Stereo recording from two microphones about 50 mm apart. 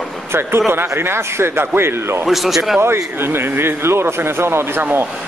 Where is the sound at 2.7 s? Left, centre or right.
Right.